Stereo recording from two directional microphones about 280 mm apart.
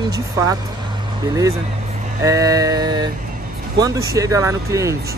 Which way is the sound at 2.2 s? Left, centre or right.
Centre.